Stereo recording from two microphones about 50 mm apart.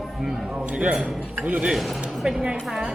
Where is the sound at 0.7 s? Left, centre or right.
Right.